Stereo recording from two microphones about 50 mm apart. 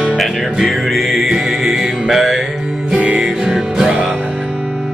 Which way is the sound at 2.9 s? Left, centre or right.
Centre.